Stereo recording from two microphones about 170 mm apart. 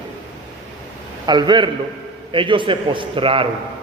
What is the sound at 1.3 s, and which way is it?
A man's voice, 25° right (ahead or behind).